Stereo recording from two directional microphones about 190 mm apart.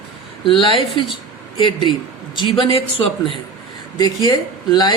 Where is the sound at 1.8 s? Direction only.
20° left (ahead or behind).